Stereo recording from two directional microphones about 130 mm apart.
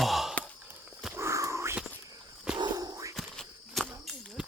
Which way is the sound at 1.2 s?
20° right (ahead or behind).